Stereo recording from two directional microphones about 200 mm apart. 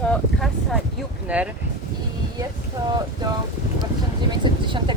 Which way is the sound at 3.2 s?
20° right (ahead or behind).